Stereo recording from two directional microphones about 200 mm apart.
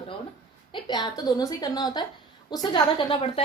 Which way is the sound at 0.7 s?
20° left (ahead or behind).